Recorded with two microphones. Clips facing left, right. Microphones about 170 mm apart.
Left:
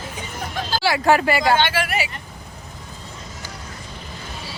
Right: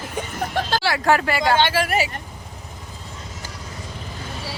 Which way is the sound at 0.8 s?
5° left (ahead or behind).